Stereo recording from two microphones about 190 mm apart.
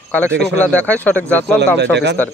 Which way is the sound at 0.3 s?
65° right (ahead or behind).